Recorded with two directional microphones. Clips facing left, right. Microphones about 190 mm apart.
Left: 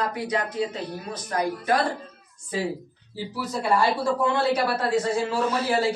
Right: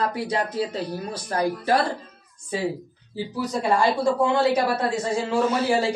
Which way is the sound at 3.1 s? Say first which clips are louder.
Right 3 dB; 20° right (ahead or behind).